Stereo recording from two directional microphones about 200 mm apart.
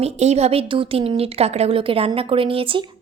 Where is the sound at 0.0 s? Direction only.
35° right (ahead or behind).